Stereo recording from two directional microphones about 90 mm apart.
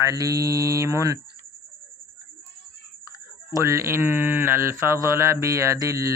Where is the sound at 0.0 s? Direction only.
40° right (ahead or behind).